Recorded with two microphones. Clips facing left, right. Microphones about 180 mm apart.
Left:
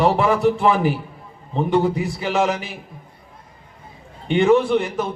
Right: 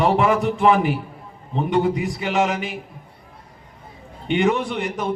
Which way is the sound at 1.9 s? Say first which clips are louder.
Even; 40° left (ahead or behind).